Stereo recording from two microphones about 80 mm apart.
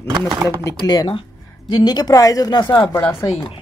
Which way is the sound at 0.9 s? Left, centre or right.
Left.